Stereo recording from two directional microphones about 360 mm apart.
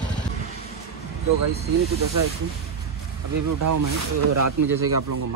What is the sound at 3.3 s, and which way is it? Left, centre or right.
Speech, right.